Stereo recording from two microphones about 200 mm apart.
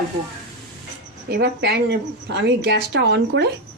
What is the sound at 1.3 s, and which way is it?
Speech, 55° right (ahead or behind).